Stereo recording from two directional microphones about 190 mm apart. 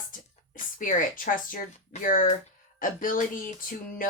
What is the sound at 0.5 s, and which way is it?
Speech, 45° left (ahead or behind).